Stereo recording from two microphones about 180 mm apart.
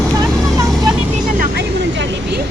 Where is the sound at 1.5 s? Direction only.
65° right (ahead or behind).